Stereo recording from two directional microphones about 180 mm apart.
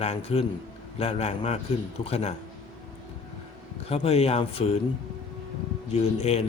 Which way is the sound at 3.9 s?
35° left (ahead or behind).